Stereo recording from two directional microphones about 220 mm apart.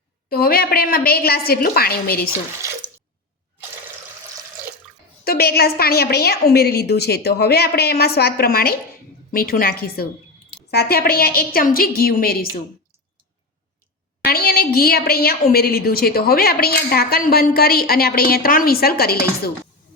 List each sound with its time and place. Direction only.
0.3 s a woman's voice: 45° left (ahead or behind)
5.2 s a woman's voice: 45° left (ahead or behind)
14.3 s a woman's voice: 45° left (ahead or behind)